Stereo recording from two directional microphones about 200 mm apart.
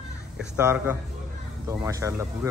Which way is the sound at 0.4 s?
10° right (ahead or behind).